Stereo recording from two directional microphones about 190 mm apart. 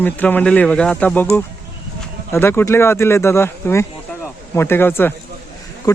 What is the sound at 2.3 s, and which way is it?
Speech, 10° left (ahead or behind).